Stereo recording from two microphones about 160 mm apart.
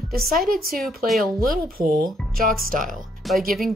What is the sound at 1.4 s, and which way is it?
Speech, 65° right (ahead or behind).